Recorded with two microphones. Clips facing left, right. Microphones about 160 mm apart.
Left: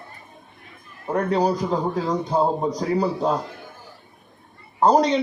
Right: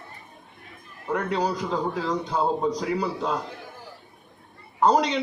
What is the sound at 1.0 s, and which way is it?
A man's voice, 30° left (ahead or behind).